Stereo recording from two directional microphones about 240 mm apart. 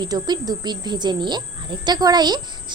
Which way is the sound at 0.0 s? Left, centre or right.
Centre.